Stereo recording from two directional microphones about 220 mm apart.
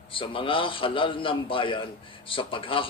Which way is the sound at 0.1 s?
25° left (ahead or behind).